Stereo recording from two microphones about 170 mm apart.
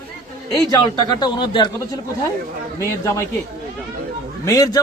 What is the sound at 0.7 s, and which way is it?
A man's voice, 25° left (ahead or behind).